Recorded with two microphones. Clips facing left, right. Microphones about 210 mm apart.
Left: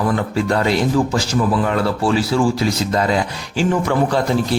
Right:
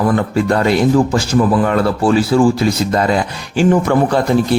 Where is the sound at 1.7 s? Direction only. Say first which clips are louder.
Right 4 dB; 55° right (ahead or behind).